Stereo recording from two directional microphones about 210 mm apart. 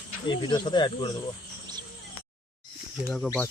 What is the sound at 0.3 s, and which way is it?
Speech, 20° left (ahead or behind).